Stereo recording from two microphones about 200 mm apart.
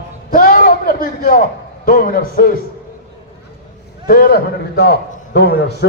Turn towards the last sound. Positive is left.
turn(degrees=55)  # may be behind; listen again after turning